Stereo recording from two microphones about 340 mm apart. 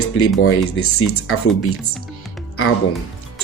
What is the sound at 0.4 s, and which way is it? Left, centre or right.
Speech, left.